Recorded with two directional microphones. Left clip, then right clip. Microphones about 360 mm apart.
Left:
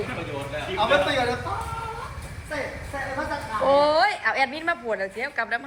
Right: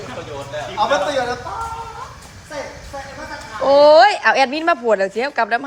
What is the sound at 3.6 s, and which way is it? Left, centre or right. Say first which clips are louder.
A woman's voice: right 10 dB; centre.